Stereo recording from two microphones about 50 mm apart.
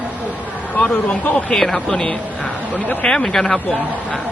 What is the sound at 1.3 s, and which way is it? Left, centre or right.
Speech, centre.